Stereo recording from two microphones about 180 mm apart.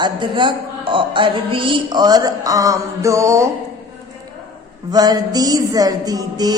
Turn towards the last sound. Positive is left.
turn(degrees=-20)  # may be behind; listen again after turning